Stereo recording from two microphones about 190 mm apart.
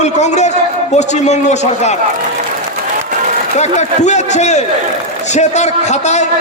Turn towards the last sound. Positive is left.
turn(degrees=35)  # may be behind; listen again after turning